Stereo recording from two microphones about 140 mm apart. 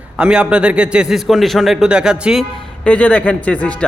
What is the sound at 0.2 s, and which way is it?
A man's voice, 5° right (ahead or behind).